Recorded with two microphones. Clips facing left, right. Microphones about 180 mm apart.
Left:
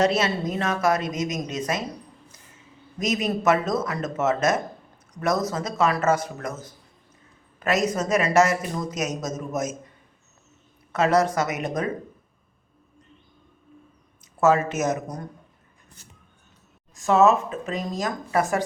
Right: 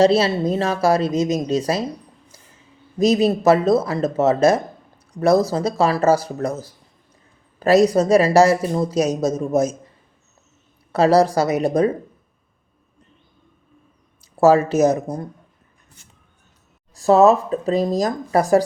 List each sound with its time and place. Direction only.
0.0 s speech: 30° right (ahead or behind)
3.0 s speech: 30° right (ahead or behind)
10.9 s speech: 35° right (ahead or behind)
14.3 s speech: 35° right (ahead or behind)
16.9 s speech: 35° right (ahead or behind)